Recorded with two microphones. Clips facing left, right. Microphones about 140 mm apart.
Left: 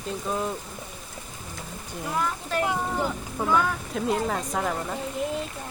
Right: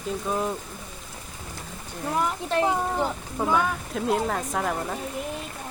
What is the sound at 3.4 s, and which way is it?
Speech, 15° right (ahead or behind).